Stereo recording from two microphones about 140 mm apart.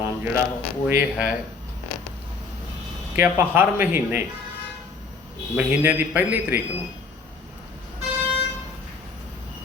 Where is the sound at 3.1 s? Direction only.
15° right (ahead or behind).